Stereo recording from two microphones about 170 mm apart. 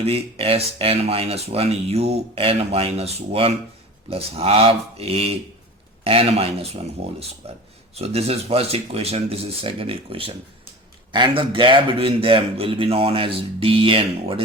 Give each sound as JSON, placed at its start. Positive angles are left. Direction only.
{"t": 0.0, "sound": "speech", "side_deg": -35}